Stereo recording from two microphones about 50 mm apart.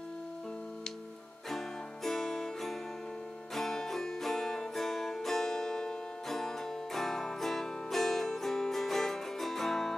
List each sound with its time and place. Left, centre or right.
2.0 s music: centre